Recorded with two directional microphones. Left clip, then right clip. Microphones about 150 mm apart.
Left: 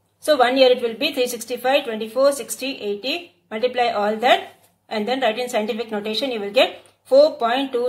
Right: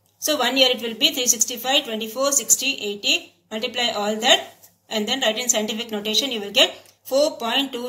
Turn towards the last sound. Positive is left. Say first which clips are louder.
# left 3 dB
turn(degrees=20)  # may be behind; listen again after turning